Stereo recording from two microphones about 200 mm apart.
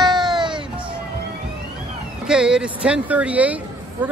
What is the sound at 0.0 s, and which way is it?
Music, 20° right (ahead or behind).